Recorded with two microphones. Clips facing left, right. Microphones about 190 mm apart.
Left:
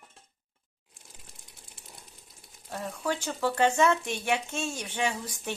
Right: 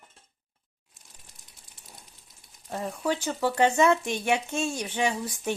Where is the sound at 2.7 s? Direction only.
15° right (ahead or behind).